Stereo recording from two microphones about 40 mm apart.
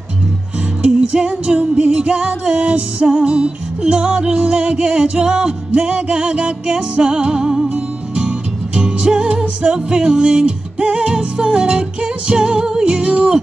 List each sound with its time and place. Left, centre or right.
0.8 s music: right